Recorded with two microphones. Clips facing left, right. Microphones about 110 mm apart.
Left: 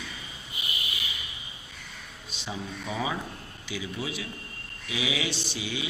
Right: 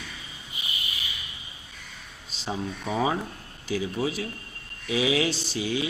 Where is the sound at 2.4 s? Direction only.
35° right (ahead or behind).